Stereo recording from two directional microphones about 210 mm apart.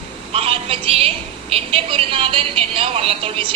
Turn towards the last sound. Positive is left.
turn(degrees=-25)  # may be behind; listen again after turning